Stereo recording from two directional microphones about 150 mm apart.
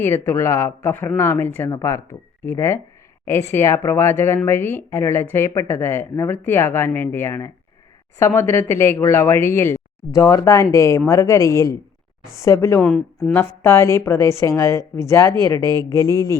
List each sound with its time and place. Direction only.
0.0 s speech: 15° left (ahead or behind)